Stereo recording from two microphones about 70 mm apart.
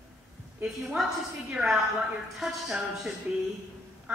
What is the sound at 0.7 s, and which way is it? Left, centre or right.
A woman's voice, centre.